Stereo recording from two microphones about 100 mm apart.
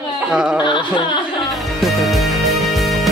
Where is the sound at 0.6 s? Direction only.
50° left (ahead or behind).